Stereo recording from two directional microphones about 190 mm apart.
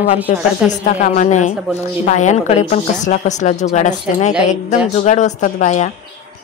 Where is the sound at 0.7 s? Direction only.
40° left (ahead or behind).